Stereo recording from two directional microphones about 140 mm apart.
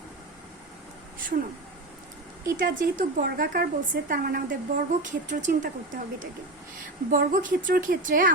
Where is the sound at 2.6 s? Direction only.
75° right (ahead or behind).